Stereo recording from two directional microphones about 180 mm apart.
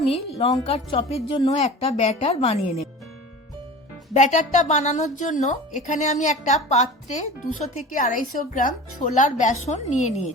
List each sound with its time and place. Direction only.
0.1 s a woman's voice: 35° left (ahead or behind)
4.1 s a woman's voice: 40° left (ahead or behind)